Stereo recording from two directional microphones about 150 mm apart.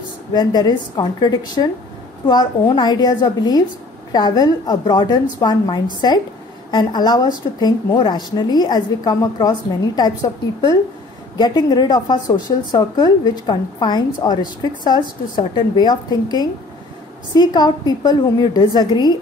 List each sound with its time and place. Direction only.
0.3 s speech: 25° left (ahead or behind)